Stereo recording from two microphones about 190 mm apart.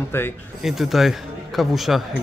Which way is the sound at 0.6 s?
Centre (ahead or behind).